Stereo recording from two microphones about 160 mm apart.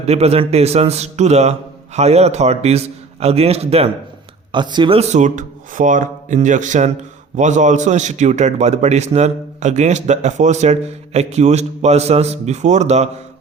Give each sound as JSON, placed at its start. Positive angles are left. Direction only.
{"t": 0.0, "sound": "a man's voice", "side_deg": -40}
{"t": 4.5, "sound": "a man's voice", "side_deg": -30}